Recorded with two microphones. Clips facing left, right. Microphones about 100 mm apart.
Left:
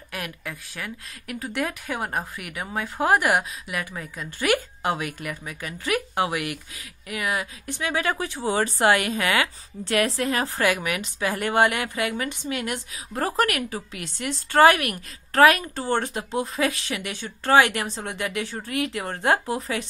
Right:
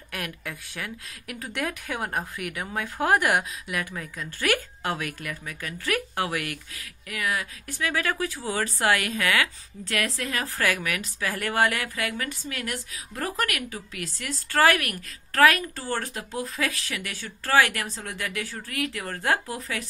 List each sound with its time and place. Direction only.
0.1 s a woman's voice: centre (ahead or behind); by 10.6 s 30° left (ahead or behind)
10.6 s a woman's voice: 20° left (ahead or behind)